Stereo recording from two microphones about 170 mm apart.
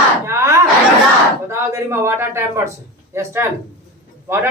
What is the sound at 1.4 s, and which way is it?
Speech, 15° right (ahead or behind).